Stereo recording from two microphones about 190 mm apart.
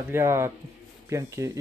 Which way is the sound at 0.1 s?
15° right (ahead or behind).